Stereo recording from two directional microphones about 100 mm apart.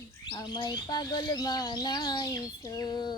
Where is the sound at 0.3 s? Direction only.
45° left (ahead or behind).